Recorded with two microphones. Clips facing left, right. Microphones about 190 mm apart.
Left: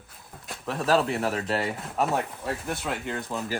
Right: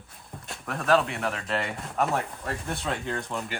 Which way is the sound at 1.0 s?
35° left (ahead or behind).